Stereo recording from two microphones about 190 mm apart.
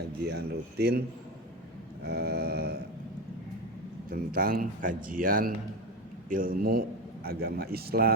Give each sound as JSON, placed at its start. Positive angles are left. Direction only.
{"t": 0.3, "sound": "speech", "side_deg": -60}
{"t": 2.0, "sound": "a sound", "side_deg": -60}
{"t": 4.1, "sound": "speech", "side_deg": -50}